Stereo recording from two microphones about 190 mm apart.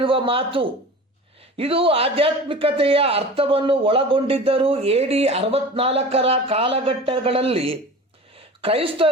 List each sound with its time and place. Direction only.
0.0 s a man's voice: 30° right (ahead or behind)